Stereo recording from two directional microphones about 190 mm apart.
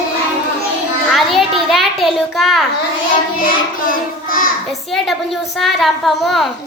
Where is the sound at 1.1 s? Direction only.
Centre (ahead or behind).